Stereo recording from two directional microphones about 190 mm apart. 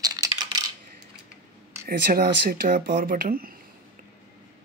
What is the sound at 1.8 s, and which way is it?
Speech, 55° right (ahead or behind).